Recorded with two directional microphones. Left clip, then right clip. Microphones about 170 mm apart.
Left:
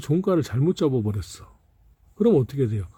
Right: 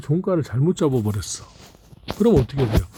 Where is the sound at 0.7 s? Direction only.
Centre (ahead or behind).